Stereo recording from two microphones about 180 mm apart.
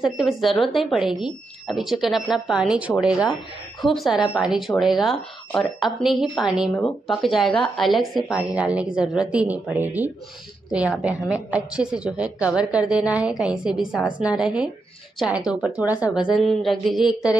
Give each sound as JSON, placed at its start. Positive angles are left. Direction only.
{"t": 0.0, "sound": "speech", "side_deg": 0}